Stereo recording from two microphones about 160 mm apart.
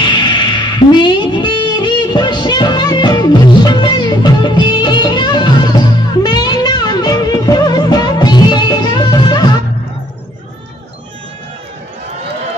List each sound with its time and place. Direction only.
0.0 s music: 30° left (ahead or behind)